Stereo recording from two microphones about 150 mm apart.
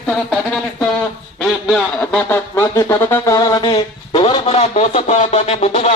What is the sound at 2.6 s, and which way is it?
Music, 20° left (ahead or behind).